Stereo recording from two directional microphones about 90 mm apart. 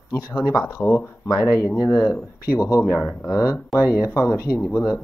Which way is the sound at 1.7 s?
40° left (ahead or behind).